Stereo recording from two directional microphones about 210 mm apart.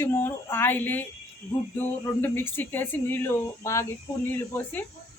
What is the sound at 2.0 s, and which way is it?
A man's voice, 10° left (ahead or behind).